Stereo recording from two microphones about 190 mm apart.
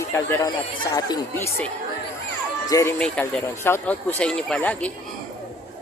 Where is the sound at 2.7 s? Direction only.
15° left (ahead or behind).